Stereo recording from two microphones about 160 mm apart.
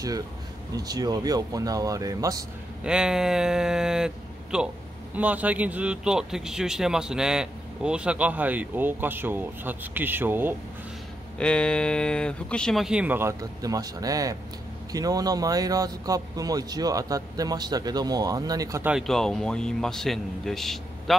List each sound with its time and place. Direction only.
0.7 s speech: 25° right (ahead or behind)
2.8 s speech: 5° right (ahead or behind)
11.3 s speech: 5° left (ahead or behind); by 18.9 s 20° right (ahead or behind)
18.9 s speech: centre (ahead or behind)